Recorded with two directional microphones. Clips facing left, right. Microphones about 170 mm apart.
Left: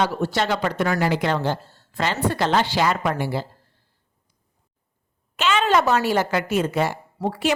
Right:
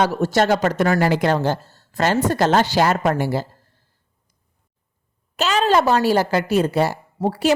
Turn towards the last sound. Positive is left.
turn(degrees=-35)  # may be behind; listen again after turning